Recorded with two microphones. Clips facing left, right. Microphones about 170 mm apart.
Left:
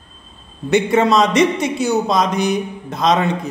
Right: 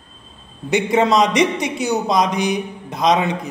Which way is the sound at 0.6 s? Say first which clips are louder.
Left 2 dB; 15° right (ahead or behind).